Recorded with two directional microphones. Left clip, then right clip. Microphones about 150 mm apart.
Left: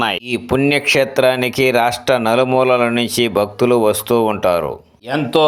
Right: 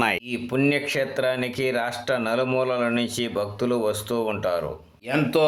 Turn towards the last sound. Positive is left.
turn(degrees=25)  # may be behind; listen again after turning